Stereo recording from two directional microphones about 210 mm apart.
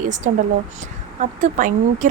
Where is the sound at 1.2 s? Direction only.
35° right (ahead or behind).